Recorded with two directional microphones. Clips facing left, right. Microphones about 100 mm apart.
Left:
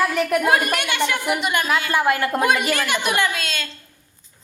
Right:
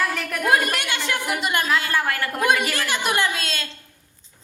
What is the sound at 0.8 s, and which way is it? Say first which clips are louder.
Speech: left 4 dB; 35° right (ahead or behind).